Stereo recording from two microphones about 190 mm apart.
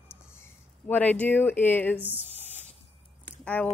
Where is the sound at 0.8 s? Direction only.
10° left (ahead or behind).